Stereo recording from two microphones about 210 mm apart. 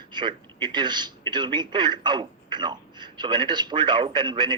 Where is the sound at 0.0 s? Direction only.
20° right (ahead or behind).